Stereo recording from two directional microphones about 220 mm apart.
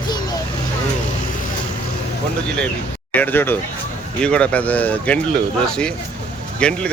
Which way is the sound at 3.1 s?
10° left (ahead or behind).